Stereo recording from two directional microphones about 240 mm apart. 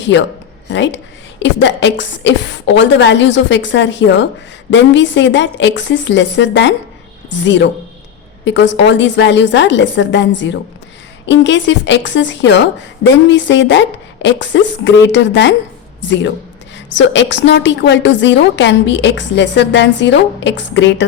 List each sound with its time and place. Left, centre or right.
0.7 s a woman's voice: left